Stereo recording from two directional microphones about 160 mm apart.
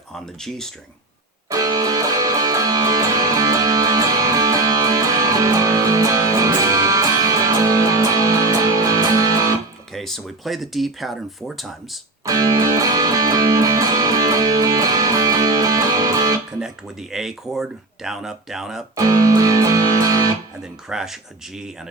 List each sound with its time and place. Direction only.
0.1 s speech: centre (ahead or behind)
1.5 s music: 20° right (ahead or behind)
9.9 s speech: centre (ahead or behind)
12.2 s music: 20° right (ahead or behind)
16.6 s speech: 5° right (ahead or behind)
18.9 s music: 20° right (ahead or behind)
20.9 s speech: 5° right (ahead or behind)